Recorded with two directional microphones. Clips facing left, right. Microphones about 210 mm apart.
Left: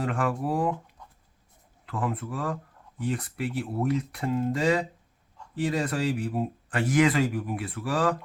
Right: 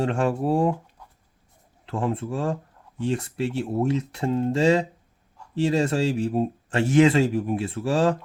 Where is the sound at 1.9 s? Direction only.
25° right (ahead or behind).